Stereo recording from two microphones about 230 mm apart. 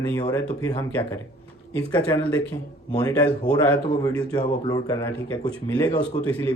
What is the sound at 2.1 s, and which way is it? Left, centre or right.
Speech, centre.